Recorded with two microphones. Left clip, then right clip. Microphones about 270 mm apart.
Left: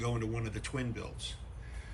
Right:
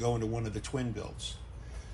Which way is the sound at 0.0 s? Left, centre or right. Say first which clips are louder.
Right 5 dB; centre.